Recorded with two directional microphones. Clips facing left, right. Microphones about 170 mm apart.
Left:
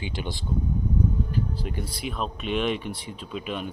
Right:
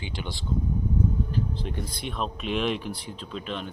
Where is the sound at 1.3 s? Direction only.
5° left (ahead or behind).